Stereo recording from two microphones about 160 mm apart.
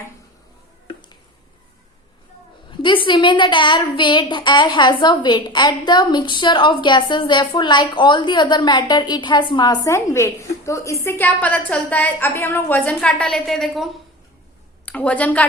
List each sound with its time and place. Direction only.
2.6 s a woman's voice: 30° left (ahead or behind); by 15.4 s 10° left (ahead or behind)